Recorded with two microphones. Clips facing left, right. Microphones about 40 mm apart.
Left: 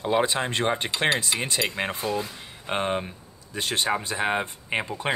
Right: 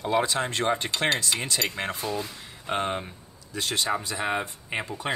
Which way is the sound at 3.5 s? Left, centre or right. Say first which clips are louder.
Left 2 dB; left.